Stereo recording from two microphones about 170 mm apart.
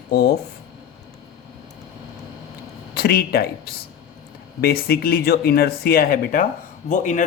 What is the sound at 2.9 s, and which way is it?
A man's voice, 65° left (ahead or behind).